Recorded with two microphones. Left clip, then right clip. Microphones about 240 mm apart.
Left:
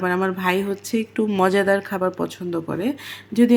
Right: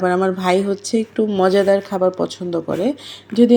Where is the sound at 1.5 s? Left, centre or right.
Centre.